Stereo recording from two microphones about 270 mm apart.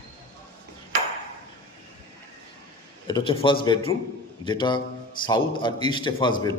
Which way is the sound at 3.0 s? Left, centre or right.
Centre.